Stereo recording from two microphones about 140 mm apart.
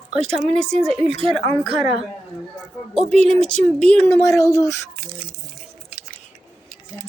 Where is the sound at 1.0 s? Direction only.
45° right (ahead or behind).